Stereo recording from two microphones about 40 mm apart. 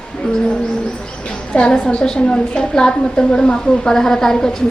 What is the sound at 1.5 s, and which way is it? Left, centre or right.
A woman's voice, left.